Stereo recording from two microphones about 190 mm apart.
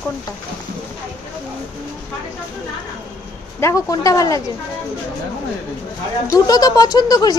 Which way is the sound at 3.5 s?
15° left (ahead or behind).